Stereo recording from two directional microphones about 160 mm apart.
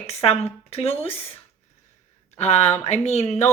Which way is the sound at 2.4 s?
45° left (ahead or behind).